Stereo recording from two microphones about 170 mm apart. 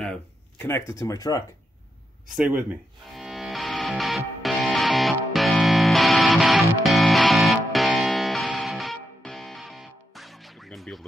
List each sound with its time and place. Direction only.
0.0 s a sound: 5° left (ahead or behind)
0.7 s speech: 15° left (ahead or behind)
2.3 s music: 10° right (ahead or behind)